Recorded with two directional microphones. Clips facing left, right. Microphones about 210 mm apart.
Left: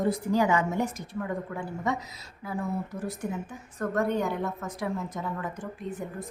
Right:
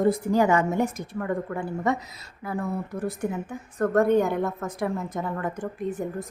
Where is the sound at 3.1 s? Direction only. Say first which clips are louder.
Right 4 dB; 55° right (ahead or behind).